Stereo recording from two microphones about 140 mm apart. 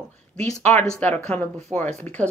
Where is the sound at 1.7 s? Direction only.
10° right (ahead or behind).